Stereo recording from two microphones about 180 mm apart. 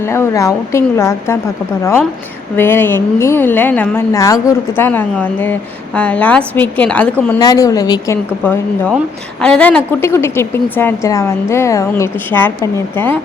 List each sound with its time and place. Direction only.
0.1 s a woman's voice: 15° left (ahead or behind)
2.6 s a woman's voice: 10° left (ahead or behind)
7.3 s a woman's voice: 20° left (ahead or behind)